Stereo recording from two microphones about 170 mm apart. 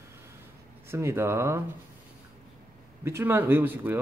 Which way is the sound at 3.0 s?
15° right (ahead or behind).